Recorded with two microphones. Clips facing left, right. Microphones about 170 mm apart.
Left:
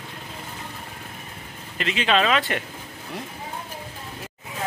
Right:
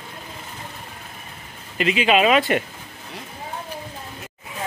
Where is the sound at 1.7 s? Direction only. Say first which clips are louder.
Right 4 dB; 10° right (ahead or behind).